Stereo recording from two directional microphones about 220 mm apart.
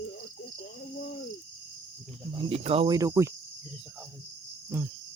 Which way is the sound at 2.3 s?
15° right (ahead or behind).